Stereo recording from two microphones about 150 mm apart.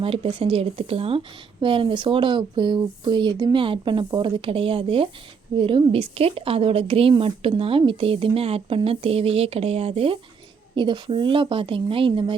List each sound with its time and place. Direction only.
0.0 s a woman's voice: 35° right (ahead or behind)